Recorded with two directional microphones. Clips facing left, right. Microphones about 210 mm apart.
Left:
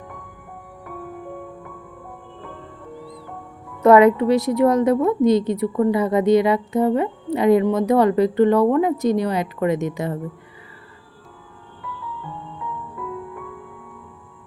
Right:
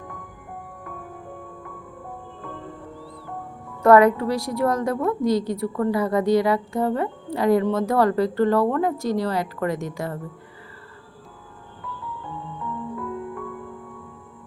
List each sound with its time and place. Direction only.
3.8 s a woman's voice: 20° left (ahead or behind)